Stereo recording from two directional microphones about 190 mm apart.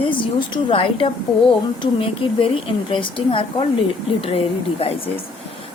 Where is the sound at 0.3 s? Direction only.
25° left (ahead or behind).